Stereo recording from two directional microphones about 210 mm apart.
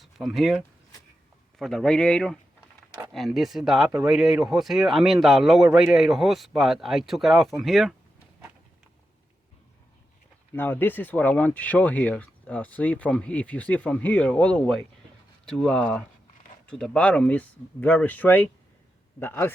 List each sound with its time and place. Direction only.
0.0 s speech: centre (ahead or behind)
10.5 s speech: 10° left (ahead or behind)